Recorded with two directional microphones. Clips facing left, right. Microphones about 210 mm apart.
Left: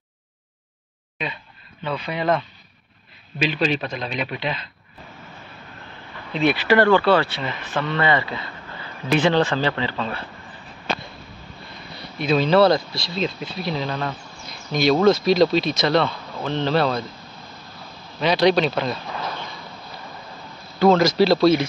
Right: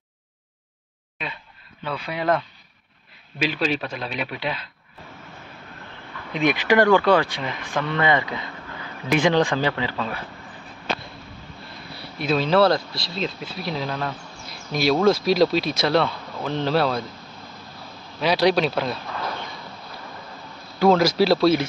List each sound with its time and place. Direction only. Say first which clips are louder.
1.2 s speech: left 4 dB; 5° right (ahead or behind)
3.3 s speech: left 2 dB; 5° right (ahead or behind)
6.3 s speech: left 1 dB; 15° right (ahead or behind)
12.0 s speech: left 2 dB; 5° right (ahead or behind)
18.2 s speech: left 2 dB; 5° right (ahead or behind)
20.8 s speech: left 1 dB; 5° right (ahead or behind)